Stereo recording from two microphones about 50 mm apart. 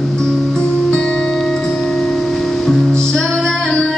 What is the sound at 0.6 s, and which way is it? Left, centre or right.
Music, centre.